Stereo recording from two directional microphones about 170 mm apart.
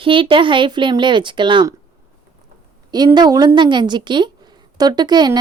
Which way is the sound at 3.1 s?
25° right (ahead or behind).